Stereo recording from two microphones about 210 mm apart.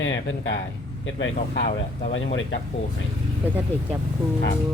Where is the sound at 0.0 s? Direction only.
60° left (ahead or behind).